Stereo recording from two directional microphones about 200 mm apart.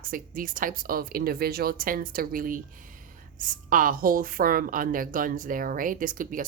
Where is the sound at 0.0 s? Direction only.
45° right (ahead or behind).